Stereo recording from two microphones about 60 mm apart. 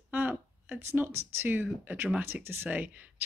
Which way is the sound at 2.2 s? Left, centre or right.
Right.